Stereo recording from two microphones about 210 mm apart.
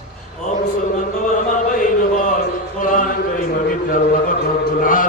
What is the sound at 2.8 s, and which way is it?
Chant, 40° left (ahead or behind).